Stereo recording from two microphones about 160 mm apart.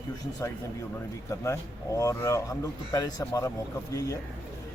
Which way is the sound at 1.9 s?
20° left (ahead or behind).